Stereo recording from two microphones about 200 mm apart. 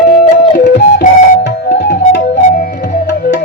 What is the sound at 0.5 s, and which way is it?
Flute, 45° left (ahead or behind).